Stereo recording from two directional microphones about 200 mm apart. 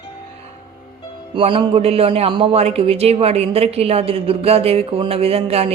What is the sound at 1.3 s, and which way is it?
Speech, 25° right (ahead or behind).